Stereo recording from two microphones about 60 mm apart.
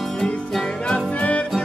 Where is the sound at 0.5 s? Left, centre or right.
Centre.